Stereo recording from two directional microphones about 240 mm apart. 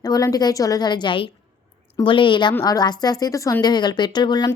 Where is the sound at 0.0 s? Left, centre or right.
Centre.